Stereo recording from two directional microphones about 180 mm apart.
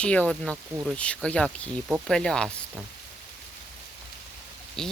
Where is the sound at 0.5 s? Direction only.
15° right (ahead or behind).